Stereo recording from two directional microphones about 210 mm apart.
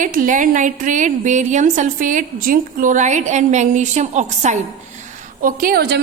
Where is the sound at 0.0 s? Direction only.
40° right (ahead or behind).